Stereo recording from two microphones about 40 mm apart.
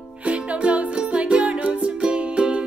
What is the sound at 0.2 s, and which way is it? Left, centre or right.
Music, right.